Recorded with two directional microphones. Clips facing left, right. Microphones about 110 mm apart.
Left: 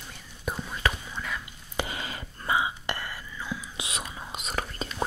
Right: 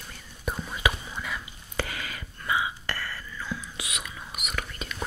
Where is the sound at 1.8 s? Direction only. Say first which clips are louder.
Left 1 dB; 25° left (ahead or behind).